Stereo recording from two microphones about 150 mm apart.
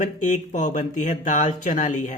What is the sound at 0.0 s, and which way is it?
A woman's voice, 55° left (ahead or behind).